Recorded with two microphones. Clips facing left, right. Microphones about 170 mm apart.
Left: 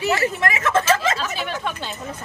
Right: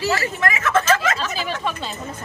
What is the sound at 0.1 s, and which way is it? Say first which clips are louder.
Speech: left 1 dB; 30° left (ahead or behind).